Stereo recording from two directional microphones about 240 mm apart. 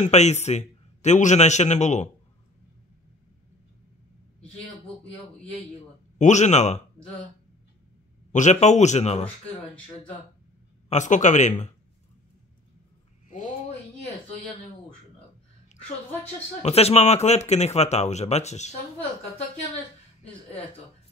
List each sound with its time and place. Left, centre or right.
0.0 s speech: left
5.8 s a sound: left
8.3 s speech: left
10.9 s a man's voice: left
13.3 s a sound: left
16.6 s speech: left